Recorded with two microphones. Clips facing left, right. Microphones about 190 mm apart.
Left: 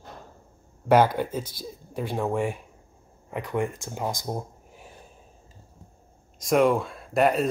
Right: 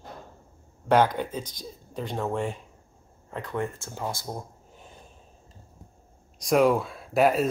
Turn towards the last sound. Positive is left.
turn(degrees=0)  # may be behind; listen again after turning